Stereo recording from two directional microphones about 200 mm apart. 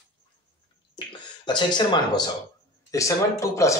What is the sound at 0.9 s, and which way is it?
Speech, 20° left (ahead or behind).